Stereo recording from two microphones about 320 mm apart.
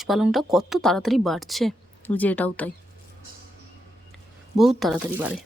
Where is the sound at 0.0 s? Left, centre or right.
Centre.